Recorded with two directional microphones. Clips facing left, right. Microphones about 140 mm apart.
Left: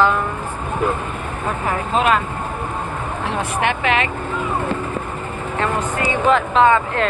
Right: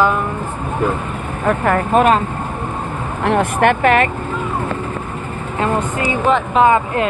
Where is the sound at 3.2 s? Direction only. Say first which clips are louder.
Right 8 dB; 55° right (ahead or behind).